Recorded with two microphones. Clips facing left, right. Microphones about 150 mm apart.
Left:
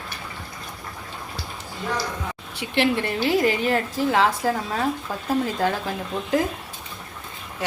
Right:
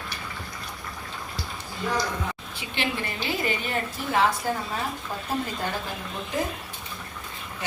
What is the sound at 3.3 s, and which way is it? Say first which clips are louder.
A woman's voice: left 9 dB; 85° left.